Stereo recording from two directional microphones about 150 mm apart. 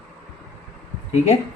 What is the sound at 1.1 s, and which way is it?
Speech, 45° left (ahead or behind).